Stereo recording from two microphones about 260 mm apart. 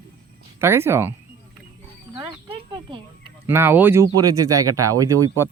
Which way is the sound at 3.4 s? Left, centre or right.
Centre.